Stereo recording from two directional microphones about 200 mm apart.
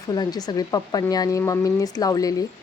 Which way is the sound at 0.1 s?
20° left (ahead or behind).